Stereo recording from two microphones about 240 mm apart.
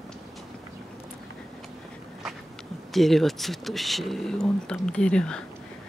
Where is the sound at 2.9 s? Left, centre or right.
Centre.